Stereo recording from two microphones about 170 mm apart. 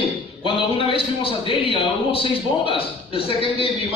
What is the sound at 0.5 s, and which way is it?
A man's voice, 35° left (ahead or behind).